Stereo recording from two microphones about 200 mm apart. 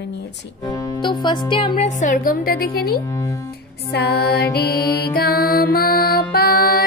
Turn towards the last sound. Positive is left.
turn(degrees=50)  # may be behind; listen again after turning